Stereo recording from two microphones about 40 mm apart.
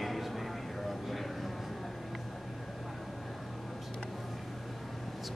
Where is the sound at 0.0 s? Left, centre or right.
Centre.